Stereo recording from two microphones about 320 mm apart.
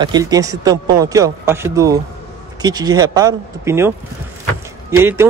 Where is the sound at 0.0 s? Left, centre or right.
Centre.